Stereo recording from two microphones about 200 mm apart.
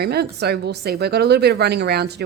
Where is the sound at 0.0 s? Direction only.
55° right (ahead or behind).